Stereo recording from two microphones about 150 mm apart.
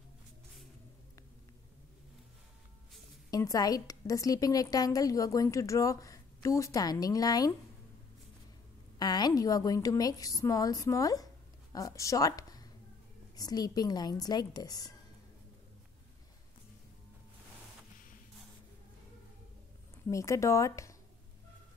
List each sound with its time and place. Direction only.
3.3 s a woman's voice: 25° left (ahead or behind)
8.9 s a woman's voice: 25° left (ahead or behind)
20.1 s a woman's voice: 20° left (ahead or behind)